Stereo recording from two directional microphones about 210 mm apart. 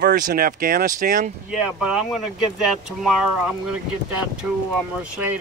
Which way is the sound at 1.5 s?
5° right (ahead or behind).